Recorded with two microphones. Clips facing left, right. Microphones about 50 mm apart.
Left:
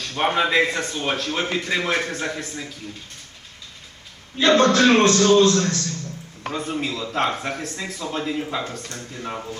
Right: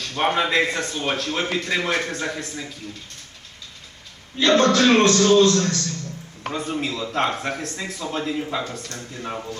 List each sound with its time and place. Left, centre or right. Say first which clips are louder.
0.0 s a man's voice: even; centre
4.4 s a man's voice: left 1 dB; left
6.5 s a man's voice: even; centre